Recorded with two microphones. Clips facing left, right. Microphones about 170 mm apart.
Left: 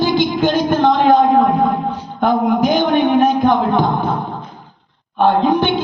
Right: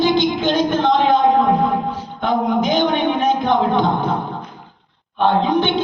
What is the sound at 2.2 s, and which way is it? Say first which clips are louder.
Speech: left 3 dB; 45° left (ahead or behind).